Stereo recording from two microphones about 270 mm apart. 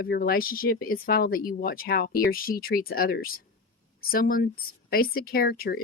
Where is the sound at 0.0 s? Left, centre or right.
Left.